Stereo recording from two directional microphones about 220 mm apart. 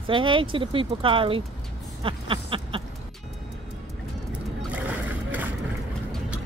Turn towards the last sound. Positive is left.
turn(degrees=-5)  # may be behind; listen again after turning